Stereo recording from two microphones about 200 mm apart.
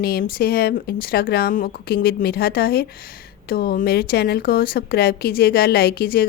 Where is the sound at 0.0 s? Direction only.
50° left (ahead or behind).